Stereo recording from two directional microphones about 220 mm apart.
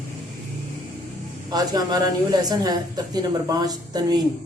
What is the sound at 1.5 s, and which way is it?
Speech, 15° right (ahead or behind).